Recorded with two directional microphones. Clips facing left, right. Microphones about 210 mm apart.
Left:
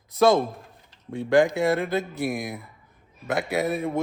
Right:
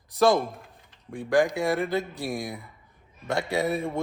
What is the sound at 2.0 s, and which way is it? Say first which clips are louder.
Speech: left 3 dB; 20° left (ahead or behind).